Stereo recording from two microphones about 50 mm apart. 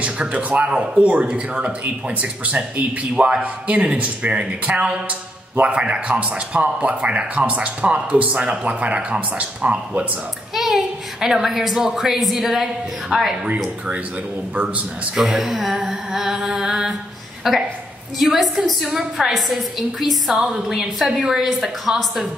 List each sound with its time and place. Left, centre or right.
0.0 s speech: right
10.5 s a child's voice: centre
15.2 s a woman's voice: centre